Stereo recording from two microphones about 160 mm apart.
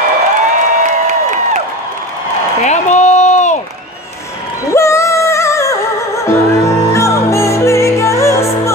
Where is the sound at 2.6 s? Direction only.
45° left (ahead or behind).